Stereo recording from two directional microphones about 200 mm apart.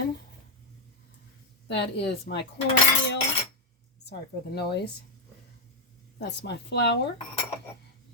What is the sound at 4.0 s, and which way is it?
Speech, 55° left (ahead or behind).